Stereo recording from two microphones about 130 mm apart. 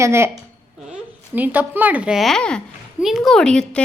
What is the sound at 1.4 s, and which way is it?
A woman's voice, 15° right (ahead or behind).